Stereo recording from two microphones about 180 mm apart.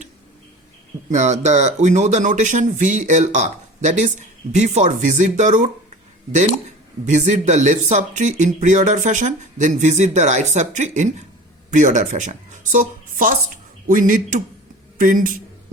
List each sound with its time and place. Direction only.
1.1 s speech: 40° right (ahead or behind)